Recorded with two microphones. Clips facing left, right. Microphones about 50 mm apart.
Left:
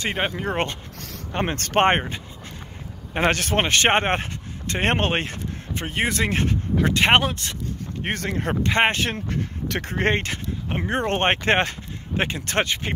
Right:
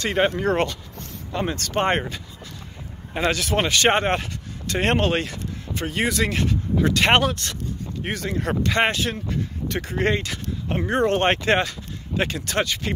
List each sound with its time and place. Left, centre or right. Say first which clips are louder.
0.0 s speech: right 4 dB; left
1.3 s speech: left 2 dB; left
1.9 s speech: left 2 dB; left
3.1 s speech: left 1 dB; left
6.9 s speech: even; centre
8.0 s speech: left 1 dB; left
8.4 s speech: even; left
8.9 s speech: even; left
10.7 s speech: right 3 dB; left